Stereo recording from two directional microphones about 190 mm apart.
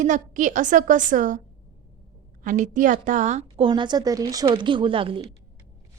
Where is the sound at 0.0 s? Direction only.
40° right (ahead or behind).